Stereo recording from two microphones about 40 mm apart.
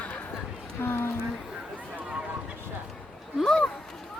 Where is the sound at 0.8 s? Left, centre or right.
Left.